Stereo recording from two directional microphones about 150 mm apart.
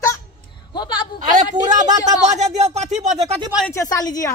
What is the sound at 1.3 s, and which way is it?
A man's voice, 55° right (ahead or behind).